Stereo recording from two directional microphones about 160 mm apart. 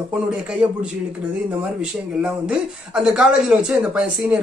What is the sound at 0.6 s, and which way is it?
Speech, 10° right (ahead or behind).